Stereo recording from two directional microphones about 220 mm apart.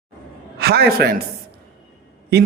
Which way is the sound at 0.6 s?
45° right (ahead or behind).